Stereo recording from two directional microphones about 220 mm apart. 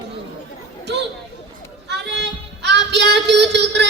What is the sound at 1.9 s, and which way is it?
Child singing, 50° right (ahead or behind).